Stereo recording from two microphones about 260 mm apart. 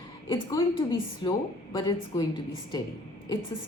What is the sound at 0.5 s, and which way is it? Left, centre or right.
A woman's voice, centre.